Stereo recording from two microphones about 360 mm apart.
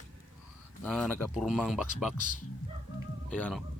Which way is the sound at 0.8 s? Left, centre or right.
Centre.